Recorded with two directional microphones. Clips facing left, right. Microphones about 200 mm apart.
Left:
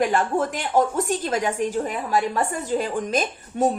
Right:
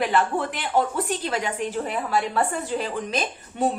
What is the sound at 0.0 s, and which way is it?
A woman's voice, 45° left (ahead or behind).